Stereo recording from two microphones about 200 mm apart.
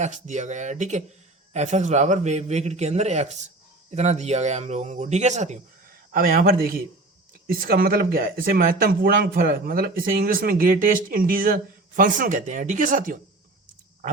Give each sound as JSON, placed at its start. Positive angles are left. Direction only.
{"t": 0.0, "sound": "a man's voice", "side_deg": -35}